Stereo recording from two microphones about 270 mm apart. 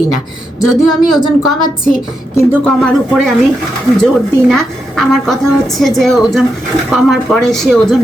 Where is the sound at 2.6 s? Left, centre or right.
Centre.